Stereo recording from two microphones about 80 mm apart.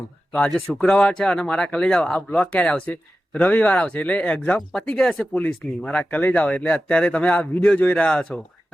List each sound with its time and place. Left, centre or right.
0.3 s speech: centre
4.7 s speech: centre